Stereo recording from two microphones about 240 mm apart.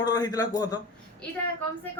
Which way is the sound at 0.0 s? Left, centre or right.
Centre.